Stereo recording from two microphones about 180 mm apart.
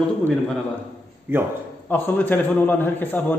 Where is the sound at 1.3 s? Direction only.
10° right (ahead or behind).